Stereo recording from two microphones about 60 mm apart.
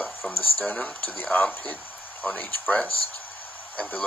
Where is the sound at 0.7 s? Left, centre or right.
Left.